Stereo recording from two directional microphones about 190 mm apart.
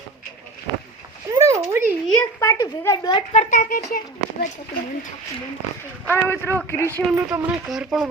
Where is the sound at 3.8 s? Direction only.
60° left (ahead or behind).